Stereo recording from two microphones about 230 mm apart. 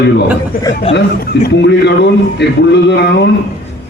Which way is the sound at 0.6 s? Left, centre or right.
Left.